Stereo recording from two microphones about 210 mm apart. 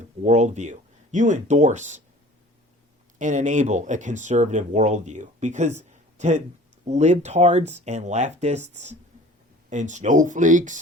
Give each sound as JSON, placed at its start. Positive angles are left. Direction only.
{"t": 0.2, "sound": "speech", "side_deg": -35}
{"t": 3.2, "sound": "speech", "side_deg": -35}